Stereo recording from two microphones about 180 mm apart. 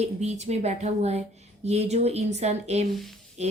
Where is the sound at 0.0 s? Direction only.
40° right (ahead or behind).